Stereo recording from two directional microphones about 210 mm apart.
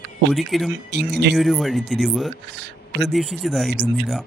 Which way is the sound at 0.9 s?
55° right (ahead or behind).